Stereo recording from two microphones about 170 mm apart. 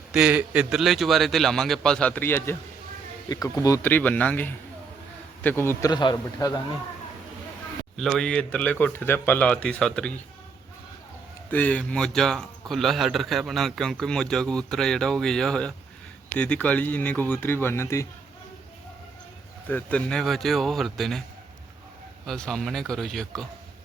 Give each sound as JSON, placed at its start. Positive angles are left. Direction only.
{"t": 0.1, "sound": "a man's voice", "side_deg": -5}
{"t": 5.9, "sound": "a man's voice", "side_deg": 25}
{"t": 7.9, "sound": "speech", "side_deg": 5}
{"t": 11.5, "sound": "a man's voice", "side_deg": 10}
{"t": 19.6, "sound": "a man's voice", "side_deg": 10}
{"t": 22.3, "sound": "a man's voice", "side_deg": 5}